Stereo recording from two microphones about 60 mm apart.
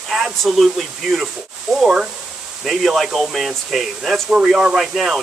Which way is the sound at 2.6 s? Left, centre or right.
Centre.